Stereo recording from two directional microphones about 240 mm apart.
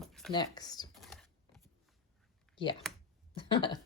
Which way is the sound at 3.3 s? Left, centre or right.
Left.